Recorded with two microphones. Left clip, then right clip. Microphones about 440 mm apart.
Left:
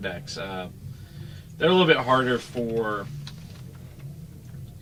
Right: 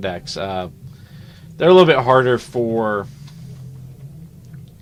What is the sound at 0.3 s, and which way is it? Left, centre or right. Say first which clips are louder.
Speech: right 9 dB; right.